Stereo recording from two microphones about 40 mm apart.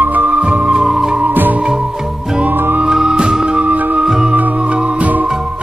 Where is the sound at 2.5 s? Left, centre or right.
Right.